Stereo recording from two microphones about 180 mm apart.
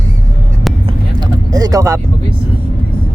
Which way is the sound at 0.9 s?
20° right (ahead or behind).